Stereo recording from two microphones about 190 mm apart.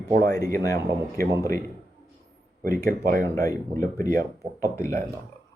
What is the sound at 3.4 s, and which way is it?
Speech, 15° left (ahead or behind).